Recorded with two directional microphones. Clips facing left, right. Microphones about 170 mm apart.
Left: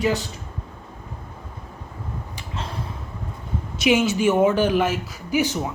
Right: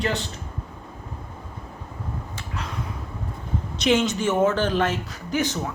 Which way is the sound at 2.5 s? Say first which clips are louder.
Left 2 dB; 30° left (ahead or behind).